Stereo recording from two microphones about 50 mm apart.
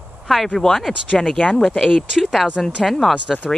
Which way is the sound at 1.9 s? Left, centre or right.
Centre.